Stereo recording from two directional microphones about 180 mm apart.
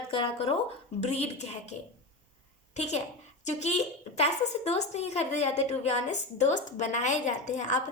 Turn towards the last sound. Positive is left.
turn(degrees=40)  # may be behind; listen again after turning